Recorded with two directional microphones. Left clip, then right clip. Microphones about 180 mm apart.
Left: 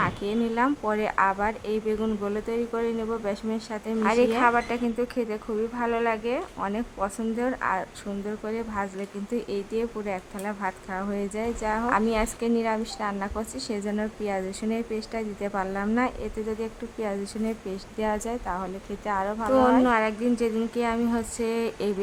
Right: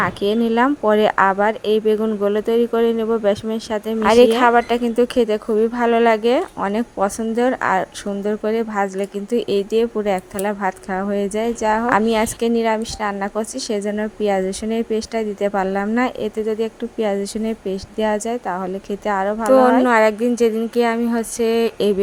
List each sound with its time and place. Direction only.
0.0 s speech: 25° right (ahead or behind)